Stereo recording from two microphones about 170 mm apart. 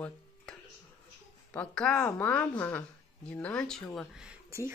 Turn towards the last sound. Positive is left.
turn(degrees=-15)  # may be behind; listen again after turning